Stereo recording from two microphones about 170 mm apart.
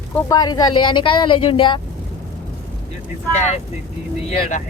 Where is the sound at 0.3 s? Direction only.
20° left (ahead or behind).